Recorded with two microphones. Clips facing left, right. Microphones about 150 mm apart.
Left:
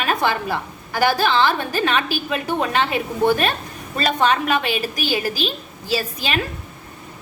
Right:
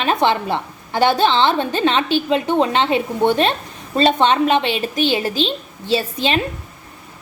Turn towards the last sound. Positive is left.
turn(degrees=-25)  # may be behind; listen again after turning